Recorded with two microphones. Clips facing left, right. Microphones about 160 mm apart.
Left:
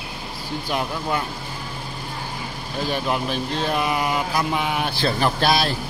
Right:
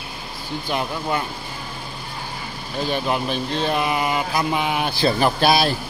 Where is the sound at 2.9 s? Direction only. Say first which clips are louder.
Right 1 dB; centre (ahead or behind).